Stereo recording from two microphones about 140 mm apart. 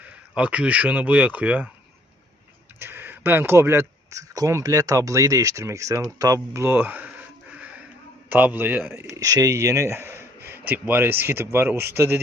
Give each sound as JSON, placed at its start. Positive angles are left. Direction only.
{"t": 0.0, "sound": "speech", "side_deg": -10}
{"t": 2.7, "sound": "speech", "side_deg": -15}
{"t": 7.5, "sound": "a sound", "side_deg": -10}
{"t": 8.3, "sound": "speech", "side_deg": -10}